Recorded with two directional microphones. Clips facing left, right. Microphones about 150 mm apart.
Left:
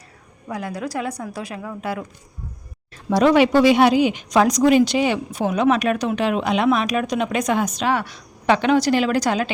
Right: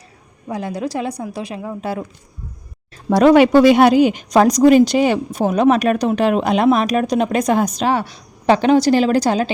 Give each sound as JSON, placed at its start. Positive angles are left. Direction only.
{"t": 0.4, "sound": "a woman's voice", "side_deg": -25}
{"t": 3.1, "sound": "speech", "side_deg": -50}